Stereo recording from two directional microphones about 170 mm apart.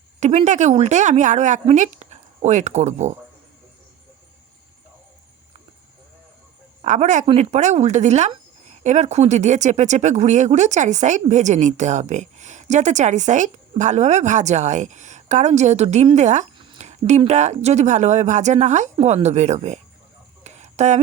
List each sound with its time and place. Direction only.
0.2 s speech: 45° right (ahead or behind)
6.8 s speech: 45° right (ahead or behind)
20.4 s a sound: 40° right (ahead or behind)